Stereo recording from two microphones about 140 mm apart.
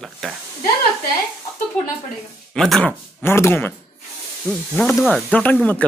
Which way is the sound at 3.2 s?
15° left (ahead or behind).